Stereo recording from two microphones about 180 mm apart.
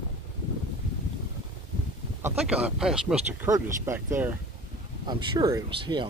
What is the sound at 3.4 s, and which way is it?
Speech, 15° right (ahead or behind).